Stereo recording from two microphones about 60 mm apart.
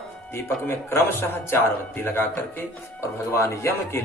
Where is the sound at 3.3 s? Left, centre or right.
Left.